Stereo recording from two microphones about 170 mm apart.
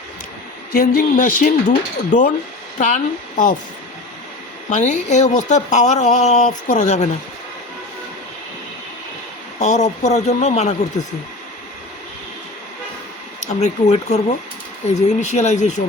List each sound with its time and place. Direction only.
0.7 s speech: 60° left (ahead or behind)
4.7 s speech: 45° left (ahead or behind)
9.6 s speech: 45° left (ahead or behind)
13.4 s speech: 45° left (ahead or behind)